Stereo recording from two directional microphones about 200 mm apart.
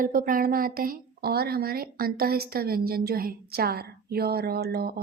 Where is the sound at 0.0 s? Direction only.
45° right (ahead or behind).